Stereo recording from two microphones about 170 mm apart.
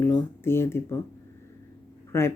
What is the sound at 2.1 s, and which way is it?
Speech, 15° left (ahead or behind).